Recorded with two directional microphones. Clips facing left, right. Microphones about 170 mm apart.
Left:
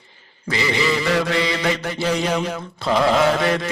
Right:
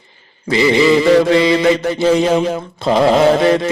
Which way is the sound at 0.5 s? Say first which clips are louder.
Right 10 dB; 25° right (ahead or behind).